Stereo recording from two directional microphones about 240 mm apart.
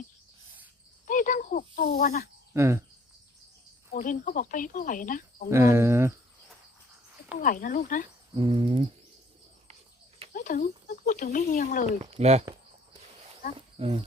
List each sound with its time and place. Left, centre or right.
1.0 s a sound: left
2.0 s speech: left
2.5 s speech: centre
3.9 s speech: left
5.5 s speech: centre
7.4 s speech: left
8.3 s speech: right
10.3 s speech: left
12.1 s speech: right
13.7 s speech: right